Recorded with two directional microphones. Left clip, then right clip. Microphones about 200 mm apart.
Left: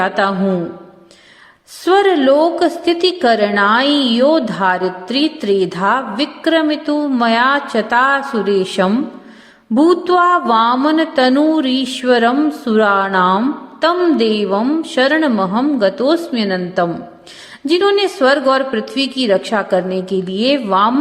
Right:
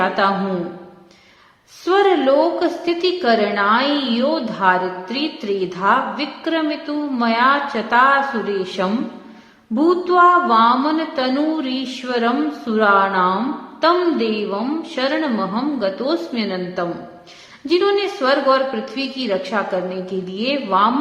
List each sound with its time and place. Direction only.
0.0 s a woman's voice: 40° left (ahead or behind)
1.8 s a woman's voice: 40° left (ahead or behind)